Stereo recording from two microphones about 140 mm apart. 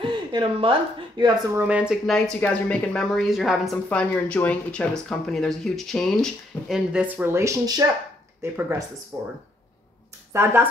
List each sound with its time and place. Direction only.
0.0 s speech: 35° right (ahead or behind)
1.6 s speech: 10° right (ahead or behind)
2.0 s speech: 5° left (ahead or behind)
4.1 s speech: 10° left (ahead or behind)
6.9 s speech: 10° right (ahead or behind)
10.3 s speech: 15° right (ahead or behind)